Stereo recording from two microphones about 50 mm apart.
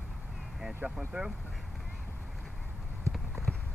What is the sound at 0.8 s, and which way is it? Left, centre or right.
Speech, right.